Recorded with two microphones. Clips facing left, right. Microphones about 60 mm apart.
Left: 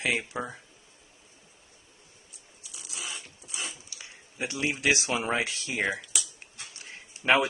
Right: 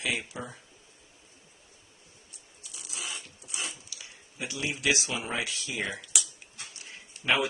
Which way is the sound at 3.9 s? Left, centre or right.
Left.